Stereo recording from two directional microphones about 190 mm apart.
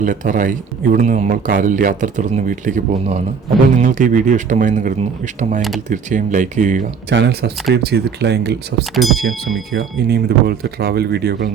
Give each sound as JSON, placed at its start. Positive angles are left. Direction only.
{"t": 0.0, "sound": "speech", "side_deg": -45}
{"t": 7.1, "sound": "speech", "side_deg": -60}
{"t": 9.0, "sound": "speech", "side_deg": 0}
{"t": 9.7, "sound": "speech", "side_deg": -55}